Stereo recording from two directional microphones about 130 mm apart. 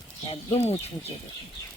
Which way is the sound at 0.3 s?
55° left (ahead or behind).